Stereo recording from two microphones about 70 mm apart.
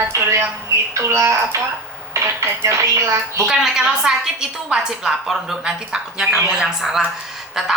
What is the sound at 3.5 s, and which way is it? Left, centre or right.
A woman's voice, centre.